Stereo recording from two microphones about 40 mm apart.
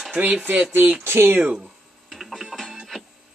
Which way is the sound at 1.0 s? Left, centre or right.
Right.